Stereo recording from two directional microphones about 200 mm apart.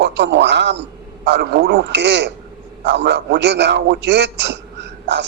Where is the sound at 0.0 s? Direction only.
60° right (ahead or behind).